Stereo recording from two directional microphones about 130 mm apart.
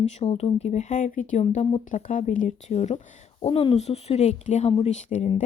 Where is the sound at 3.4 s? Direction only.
45° left (ahead or behind); by 5.2 s 60° left (ahead or behind).